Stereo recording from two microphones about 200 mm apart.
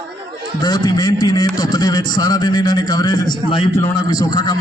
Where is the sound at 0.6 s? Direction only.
20° left (ahead or behind).